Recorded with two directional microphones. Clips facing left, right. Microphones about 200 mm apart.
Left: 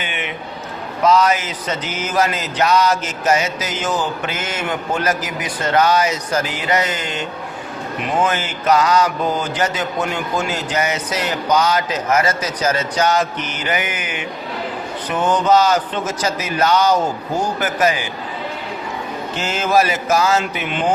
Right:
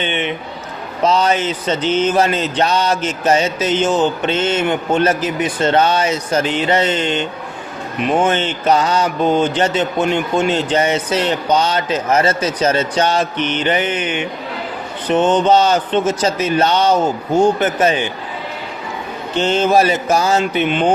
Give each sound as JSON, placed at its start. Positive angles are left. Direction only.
{"t": 0.0, "sound": "mantra", "side_deg": -30}
{"t": 19.4, "sound": "mantra", "side_deg": -30}